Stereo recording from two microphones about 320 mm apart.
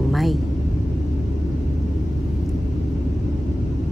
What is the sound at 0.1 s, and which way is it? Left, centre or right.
Vehicle, centre.